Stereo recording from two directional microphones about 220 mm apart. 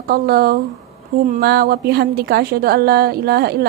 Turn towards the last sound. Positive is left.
turn(degrees=-45)  # may be behind; listen again after turning